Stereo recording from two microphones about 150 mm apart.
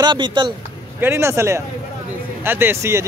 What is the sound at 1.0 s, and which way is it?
Speech, 15° right (ahead or behind).